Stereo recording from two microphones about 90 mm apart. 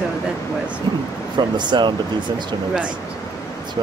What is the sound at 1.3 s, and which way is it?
Speech, 55° right (ahead or behind).